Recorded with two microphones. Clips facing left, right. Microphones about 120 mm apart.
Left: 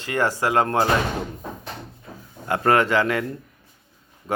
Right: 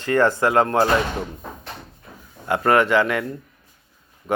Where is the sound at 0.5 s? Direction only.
30° right (ahead or behind).